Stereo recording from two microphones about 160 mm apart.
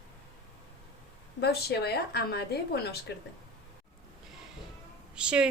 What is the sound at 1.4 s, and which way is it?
A woman's voice, 90° left.